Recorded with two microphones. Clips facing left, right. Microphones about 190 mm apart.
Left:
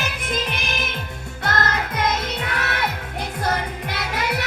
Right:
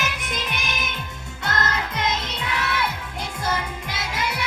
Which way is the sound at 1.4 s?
50° left (ahead or behind).